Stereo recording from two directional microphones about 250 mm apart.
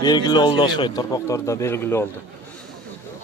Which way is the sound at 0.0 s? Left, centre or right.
Centre.